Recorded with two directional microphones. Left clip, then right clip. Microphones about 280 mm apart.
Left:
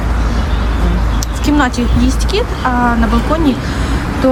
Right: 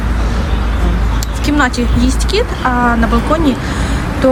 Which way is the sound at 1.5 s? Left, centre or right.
Centre.